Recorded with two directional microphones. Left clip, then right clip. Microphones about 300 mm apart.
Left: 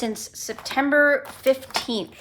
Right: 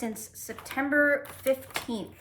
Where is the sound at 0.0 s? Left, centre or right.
Centre.